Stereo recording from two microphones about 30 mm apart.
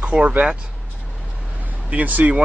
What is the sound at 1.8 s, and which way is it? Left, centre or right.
Speech, right.